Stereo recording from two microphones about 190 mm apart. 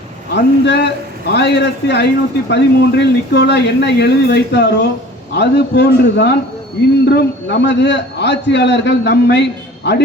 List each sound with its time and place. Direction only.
0.3 s a man's voice: 65° left (ahead or behind)